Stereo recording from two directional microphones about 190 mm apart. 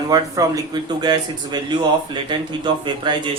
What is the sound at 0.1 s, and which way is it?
Speech, 20° right (ahead or behind).